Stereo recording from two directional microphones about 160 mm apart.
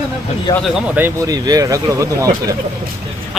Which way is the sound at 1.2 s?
25° right (ahead or behind).